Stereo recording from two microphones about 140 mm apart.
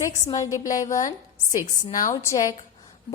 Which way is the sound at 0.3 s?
25° left (ahead or behind).